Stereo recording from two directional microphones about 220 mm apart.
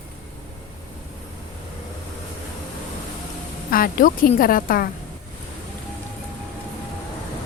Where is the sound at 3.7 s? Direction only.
40° left (ahead or behind).